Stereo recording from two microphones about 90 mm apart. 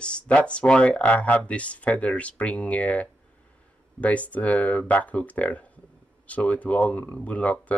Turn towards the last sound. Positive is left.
turn(degrees=15)  # may be behind; listen again after turning